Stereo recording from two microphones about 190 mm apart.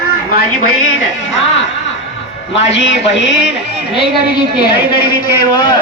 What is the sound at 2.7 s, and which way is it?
Speech, 70° left (ahead or behind).